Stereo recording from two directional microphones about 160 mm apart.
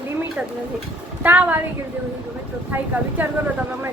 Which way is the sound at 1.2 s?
10° right (ahead or behind).